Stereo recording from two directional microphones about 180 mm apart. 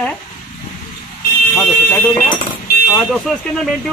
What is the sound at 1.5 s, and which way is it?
Speech, centre (ahead or behind).